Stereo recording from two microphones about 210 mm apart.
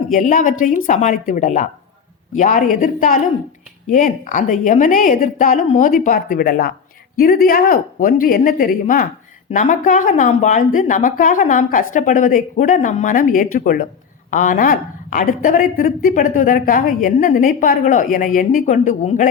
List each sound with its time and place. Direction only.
0.1 s a woman's voice: 35° left (ahead or behind)